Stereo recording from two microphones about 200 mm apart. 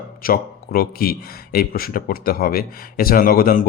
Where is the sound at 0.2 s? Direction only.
45° left (ahead or behind).